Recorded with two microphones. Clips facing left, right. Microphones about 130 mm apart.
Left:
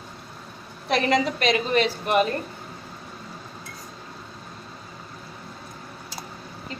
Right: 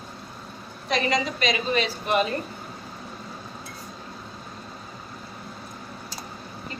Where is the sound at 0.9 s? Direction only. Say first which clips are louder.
Left 3 dB; 60° left (ahead or behind).